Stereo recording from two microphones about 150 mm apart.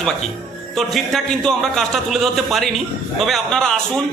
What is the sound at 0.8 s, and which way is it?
A man's voice, centre (ahead or behind).